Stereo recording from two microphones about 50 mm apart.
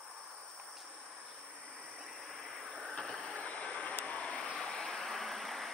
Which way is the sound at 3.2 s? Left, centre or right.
Left.